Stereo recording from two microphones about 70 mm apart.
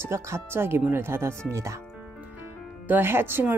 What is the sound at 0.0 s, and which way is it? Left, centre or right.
Speech, right.